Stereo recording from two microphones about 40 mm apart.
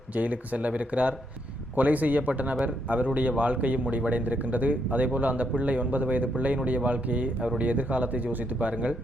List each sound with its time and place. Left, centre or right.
0.1 s speech: right